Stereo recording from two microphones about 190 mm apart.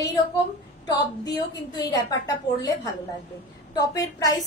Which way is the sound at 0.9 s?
20° left (ahead or behind).